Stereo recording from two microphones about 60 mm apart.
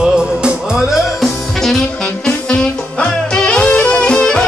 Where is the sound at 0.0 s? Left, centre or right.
Centre.